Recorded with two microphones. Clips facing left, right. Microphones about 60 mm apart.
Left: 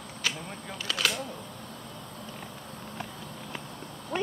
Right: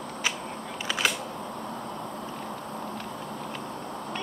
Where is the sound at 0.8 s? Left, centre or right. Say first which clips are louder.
Right 2 dB; centre.